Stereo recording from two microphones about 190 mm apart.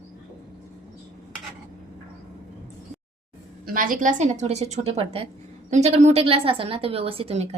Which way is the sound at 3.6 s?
45° right (ahead or behind).